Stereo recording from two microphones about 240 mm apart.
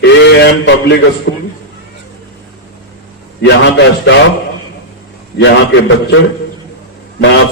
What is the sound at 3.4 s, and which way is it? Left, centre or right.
Speech, left.